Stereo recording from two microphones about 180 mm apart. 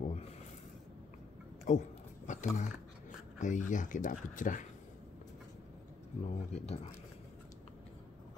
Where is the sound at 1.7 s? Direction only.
40° left (ahead or behind).